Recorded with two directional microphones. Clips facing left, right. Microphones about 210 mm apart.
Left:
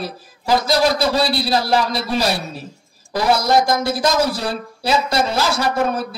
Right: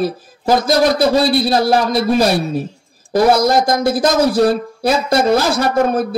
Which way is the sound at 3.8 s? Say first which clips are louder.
Right 4 dB; 50° right (ahead or behind).